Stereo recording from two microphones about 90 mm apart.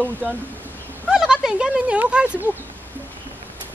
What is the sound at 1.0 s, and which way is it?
Speech, 5° right (ahead or behind).